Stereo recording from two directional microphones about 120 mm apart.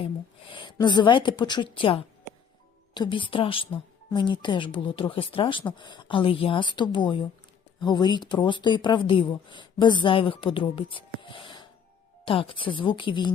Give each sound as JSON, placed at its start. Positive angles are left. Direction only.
{"t": 0.5, "sound": "a woman's voice", "side_deg": 40}